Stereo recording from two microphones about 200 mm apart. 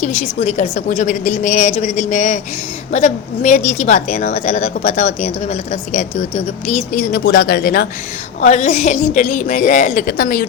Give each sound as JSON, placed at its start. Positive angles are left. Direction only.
{"t": 0.0, "sound": "a woman's voice", "side_deg": 40}
{"t": 8.4, "sound": "a woman's voice", "side_deg": 35}